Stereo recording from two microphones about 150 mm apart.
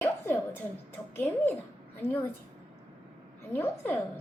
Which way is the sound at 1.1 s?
15° left (ahead or behind).